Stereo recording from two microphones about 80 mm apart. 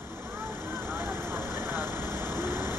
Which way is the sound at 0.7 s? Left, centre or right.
Right.